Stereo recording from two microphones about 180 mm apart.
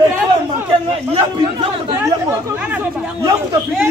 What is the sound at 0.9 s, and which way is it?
A man's voice, 30° right (ahead or behind).